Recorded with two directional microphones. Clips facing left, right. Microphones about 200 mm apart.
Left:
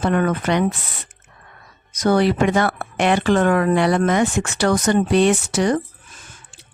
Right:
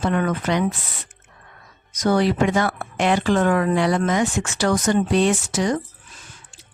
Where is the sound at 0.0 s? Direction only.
55° left (ahead or behind).